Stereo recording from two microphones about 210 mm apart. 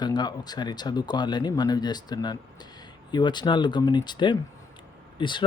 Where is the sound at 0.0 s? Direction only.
20° left (ahead or behind).